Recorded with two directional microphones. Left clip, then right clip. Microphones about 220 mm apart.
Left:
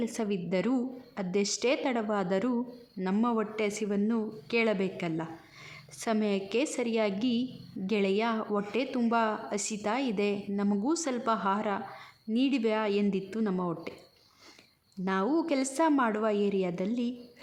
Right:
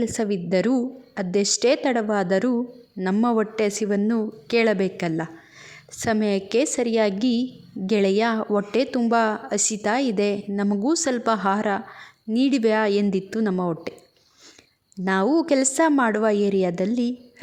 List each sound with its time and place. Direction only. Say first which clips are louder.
0.0 s speech: right 8 dB; 25° right (ahead or behind)
15.0 s speech: right 8 dB; 30° right (ahead or behind)